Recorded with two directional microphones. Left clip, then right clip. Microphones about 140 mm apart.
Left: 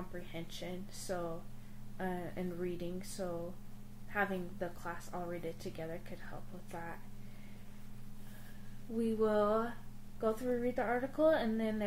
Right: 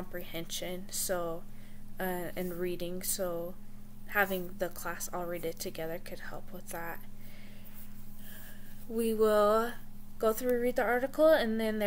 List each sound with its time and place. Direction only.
0.1 s a woman's voice: 20° right (ahead or behind)
8.9 s a woman's voice: 20° right (ahead or behind)